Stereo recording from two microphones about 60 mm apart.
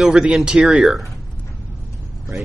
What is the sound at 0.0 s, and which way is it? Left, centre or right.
Speech, centre.